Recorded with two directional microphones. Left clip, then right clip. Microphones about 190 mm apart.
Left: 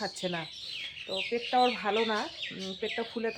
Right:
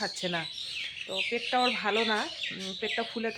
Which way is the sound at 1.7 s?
15° right (ahead or behind).